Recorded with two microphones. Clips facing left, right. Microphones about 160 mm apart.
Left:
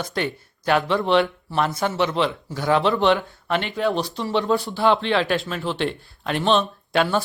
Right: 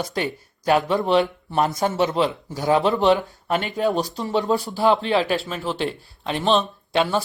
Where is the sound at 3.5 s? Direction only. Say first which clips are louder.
Right 1 dB; 40° right (ahead or behind).